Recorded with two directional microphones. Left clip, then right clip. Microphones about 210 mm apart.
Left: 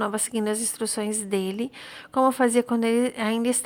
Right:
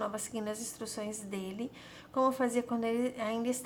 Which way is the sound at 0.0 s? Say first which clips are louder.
Left 10 dB; 40° left (ahead or behind).